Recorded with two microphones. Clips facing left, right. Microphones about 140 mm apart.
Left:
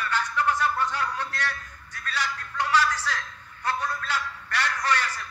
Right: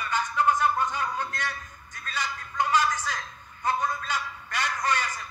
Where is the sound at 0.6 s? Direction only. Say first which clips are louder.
Right 1 dB; 15° right (ahead or behind).